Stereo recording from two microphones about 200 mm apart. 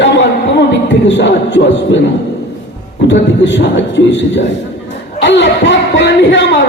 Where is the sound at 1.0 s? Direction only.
65° left (ahead or behind).